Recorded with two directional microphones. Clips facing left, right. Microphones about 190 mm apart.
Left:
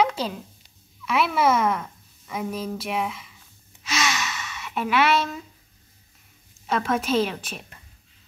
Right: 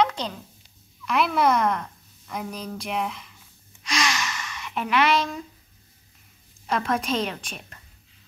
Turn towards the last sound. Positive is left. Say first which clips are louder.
# left 2 dB
turn(degrees=5)  # may be behind; listen again after turning